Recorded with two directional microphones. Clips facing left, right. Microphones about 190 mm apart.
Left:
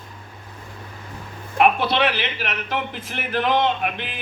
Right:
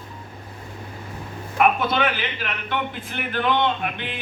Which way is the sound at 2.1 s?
90° left.